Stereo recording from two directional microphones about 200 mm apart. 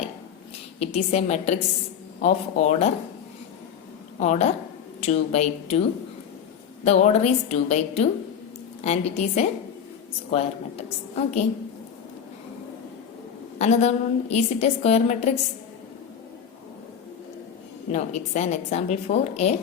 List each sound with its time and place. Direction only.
0.8 s a woman's voice: 35° left (ahead or behind)
4.2 s a woman's voice: 35° left (ahead or behind)
6.8 s a woman's voice: 35° left (ahead or behind)
13.6 s a woman's voice: 35° left (ahead or behind)
17.9 s a woman's voice: 35° left (ahead or behind)